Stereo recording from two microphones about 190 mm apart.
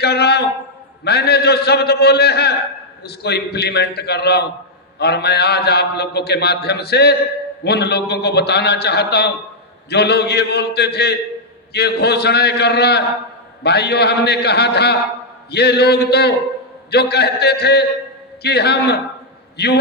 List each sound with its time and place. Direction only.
0.0 s a man's voice: 60° left (ahead or behind)